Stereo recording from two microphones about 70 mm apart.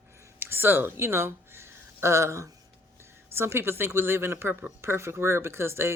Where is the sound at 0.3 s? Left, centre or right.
Right.